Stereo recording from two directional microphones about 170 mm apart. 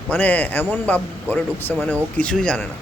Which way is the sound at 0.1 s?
10° left (ahead or behind).